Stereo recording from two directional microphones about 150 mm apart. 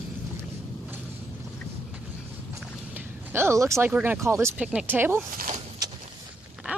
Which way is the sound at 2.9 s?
15° right (ahead or behind).